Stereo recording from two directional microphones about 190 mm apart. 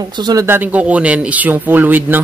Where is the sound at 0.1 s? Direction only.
20° right (ahead or behind).